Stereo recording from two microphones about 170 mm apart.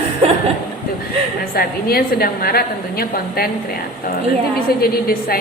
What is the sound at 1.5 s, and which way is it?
A woman's voice, 65° left (ahead or behind).